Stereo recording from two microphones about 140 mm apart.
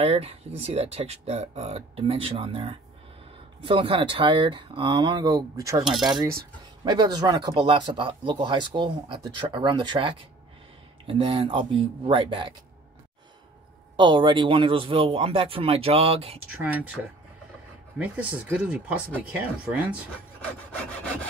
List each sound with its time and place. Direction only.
0.0 s speech: 45° right (ahead or behind); by 5.8 s 25° right (ahead or behind)
6.8 s speech: 30° right (ahead or behind)
13.9 s speech: 35° right (ahead or behind)
16.6 s speech: 10° right (ahead or behind)